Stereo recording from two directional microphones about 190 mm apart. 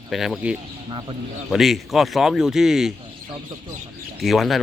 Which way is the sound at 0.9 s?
25° right (ahead or behind).